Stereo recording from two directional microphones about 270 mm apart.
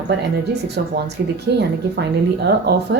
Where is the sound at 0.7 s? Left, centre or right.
Right.